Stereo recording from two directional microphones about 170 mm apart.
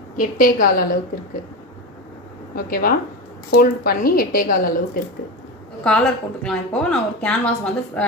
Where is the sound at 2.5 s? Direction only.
60° left (ahead or behind).